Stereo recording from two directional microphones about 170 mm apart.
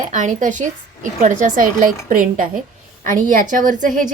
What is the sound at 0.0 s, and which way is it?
A woman's voice, 50° right (ahead or behind).